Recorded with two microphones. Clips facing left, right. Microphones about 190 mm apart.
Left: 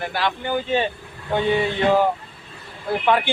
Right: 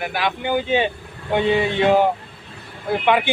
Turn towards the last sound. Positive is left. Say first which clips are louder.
# right 1 dB
turn(degrees=-15)  # may be behind; listen again after turning